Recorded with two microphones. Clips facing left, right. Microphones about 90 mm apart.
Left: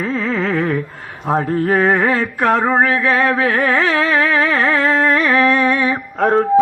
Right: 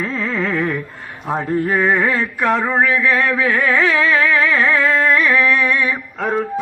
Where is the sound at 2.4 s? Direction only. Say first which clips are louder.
Left 3 dB; 35° left (ahead or behind).